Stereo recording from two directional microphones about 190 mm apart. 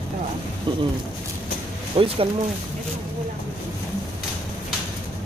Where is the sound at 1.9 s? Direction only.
30° right (ahead or behind).